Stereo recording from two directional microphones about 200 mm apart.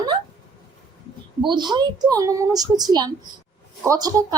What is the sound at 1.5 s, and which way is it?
A woman's voice, 20° right (ahead or behind).